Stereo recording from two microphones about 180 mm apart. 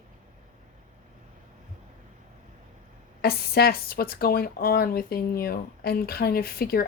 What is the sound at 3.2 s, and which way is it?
A woman's voice, 60° left (ahead or behind).